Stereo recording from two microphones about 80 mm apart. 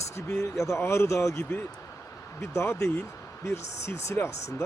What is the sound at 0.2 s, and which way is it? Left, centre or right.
Speech, left.